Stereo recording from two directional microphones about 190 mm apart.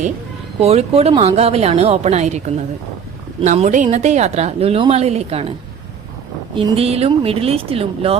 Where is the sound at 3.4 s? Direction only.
40° right (ahead or behind).